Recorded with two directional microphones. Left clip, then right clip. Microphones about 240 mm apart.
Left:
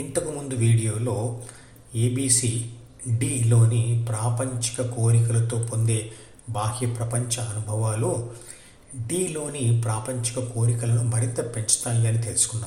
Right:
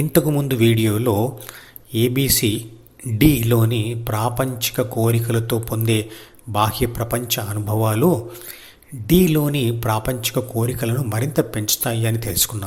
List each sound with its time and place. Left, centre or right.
0.1 s speech: right
9.0 s speech: right